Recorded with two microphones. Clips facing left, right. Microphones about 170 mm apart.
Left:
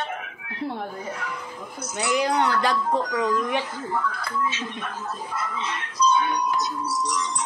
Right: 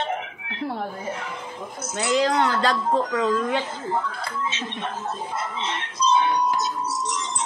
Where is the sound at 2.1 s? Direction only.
15° left (ahead or behind).